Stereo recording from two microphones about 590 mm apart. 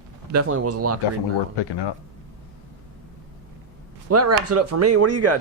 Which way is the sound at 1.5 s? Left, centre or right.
Left.